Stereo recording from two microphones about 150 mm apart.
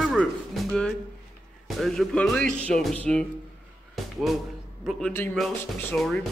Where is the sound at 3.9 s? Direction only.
Centre (ahead or behind).